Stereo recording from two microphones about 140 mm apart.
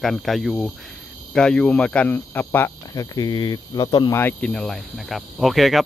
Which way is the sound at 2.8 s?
25° left (ahead or behind).